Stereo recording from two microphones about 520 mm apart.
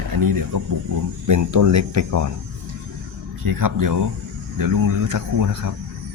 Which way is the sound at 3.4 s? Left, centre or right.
Right.